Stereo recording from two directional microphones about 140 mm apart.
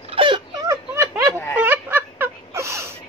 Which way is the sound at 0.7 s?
25° right (ahead or behind).